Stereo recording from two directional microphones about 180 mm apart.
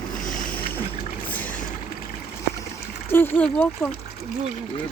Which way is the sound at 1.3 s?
10° left (ahead or behind).